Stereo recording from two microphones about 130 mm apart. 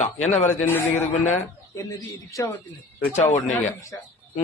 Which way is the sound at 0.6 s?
15° left (ahead or behind).